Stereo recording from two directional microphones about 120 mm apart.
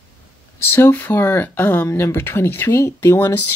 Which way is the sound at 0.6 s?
20° left (ahead or behind).